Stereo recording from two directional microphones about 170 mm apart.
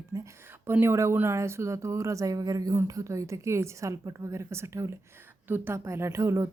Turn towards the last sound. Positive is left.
turn(degrees=-15)  # may be behind; listen again after turning